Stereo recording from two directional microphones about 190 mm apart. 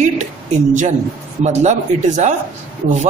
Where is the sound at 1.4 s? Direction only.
40° right (ahead or behind).